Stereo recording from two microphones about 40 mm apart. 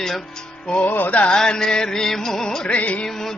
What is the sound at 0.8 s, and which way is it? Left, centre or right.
Music, left.